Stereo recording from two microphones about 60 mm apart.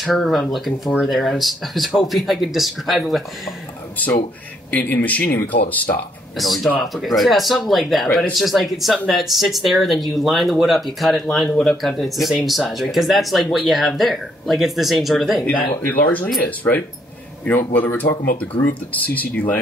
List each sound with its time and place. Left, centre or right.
0.0 s speech: centre
4.6 s speech: left
6.3 s speech: centre
15.8 s speech: left